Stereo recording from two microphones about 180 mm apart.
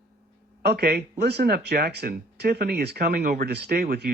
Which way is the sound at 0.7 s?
65° right (ahead or behind).